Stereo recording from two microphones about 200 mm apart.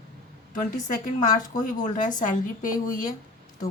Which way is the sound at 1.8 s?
35° left (ahead or behind).